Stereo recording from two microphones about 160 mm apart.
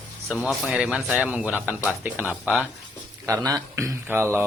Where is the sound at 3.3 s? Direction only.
20° right (ahead or behind).